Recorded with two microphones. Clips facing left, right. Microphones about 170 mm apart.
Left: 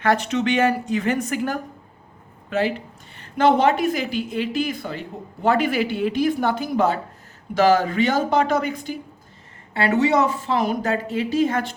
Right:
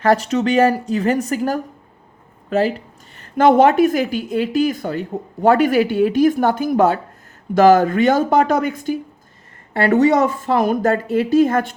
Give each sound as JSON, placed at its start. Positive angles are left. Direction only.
{"t": 0.0, "sound": "a woman's voice", "side_deg": -35}